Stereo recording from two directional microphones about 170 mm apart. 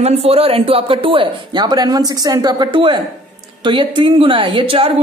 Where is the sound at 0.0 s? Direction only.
40° right (ahead or behind).